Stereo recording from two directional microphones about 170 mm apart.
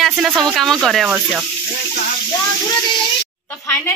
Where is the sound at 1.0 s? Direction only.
10° right (ahead or behind).